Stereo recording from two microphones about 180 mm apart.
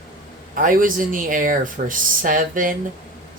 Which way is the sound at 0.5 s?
50° right (ahead or behind).